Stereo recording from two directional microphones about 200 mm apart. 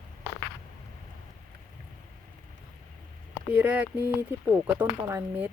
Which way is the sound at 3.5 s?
5° right (ahead or behind).